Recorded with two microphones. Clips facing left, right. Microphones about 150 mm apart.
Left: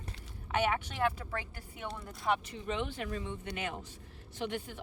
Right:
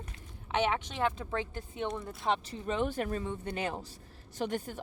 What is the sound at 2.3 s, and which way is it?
Speech, 35° right (ahead or behind).